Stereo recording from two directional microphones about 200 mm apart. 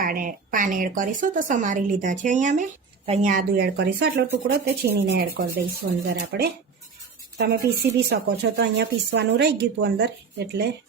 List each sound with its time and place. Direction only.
0.0 s a woman's voice: 45° right (ahead or behind)